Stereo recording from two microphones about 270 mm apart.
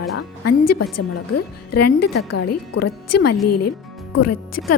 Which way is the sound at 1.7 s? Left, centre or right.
Left.